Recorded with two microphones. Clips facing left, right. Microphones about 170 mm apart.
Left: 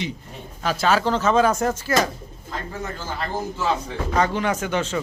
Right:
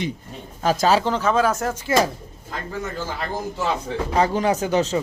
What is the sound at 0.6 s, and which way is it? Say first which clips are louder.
Speech: right 3 dB; 45° right (ahead or behind).